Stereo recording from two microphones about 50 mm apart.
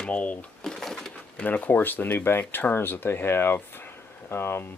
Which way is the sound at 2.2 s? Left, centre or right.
Left.